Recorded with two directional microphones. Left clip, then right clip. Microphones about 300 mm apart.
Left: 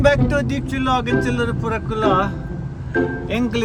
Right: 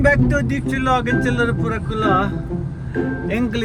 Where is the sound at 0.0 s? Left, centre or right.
Centre.